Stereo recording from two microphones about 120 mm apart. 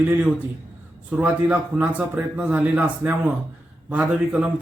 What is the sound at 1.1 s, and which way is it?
Speech, 10° right (ahead or behind).